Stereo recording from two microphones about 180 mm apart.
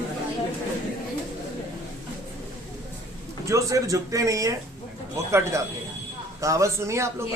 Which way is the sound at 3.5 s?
15° right (ahead or behind).